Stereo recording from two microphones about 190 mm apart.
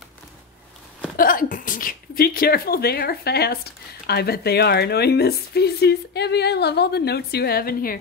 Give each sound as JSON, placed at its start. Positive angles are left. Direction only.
{"t": 1.1, "sound": "speech", "side_deg": 45}